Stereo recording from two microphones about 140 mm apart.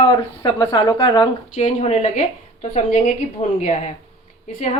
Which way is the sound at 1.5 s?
60° left (ahead or behind).